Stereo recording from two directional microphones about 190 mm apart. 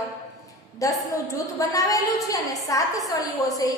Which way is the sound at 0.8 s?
15° left (ahead or behind).